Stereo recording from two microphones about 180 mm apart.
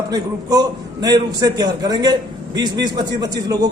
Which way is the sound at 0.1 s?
20° right (ahead or behind).